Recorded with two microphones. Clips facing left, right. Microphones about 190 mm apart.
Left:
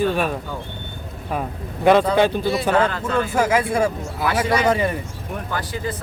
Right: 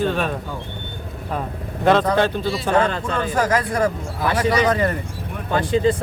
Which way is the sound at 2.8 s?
25° right (ahead or behind).